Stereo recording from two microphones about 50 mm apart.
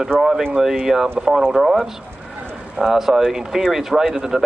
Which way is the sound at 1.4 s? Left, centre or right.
Centre.